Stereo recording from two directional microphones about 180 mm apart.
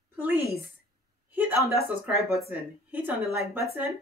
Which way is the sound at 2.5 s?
10° right (ahead or behind).